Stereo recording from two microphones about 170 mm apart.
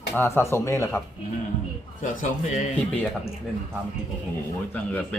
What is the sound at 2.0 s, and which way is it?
Speech, 50° left (ahead or behind).